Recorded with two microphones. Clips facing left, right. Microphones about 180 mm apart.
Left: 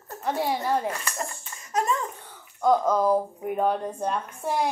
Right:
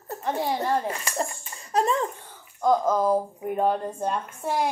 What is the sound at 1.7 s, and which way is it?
Speech, 30° right (ahead or behind).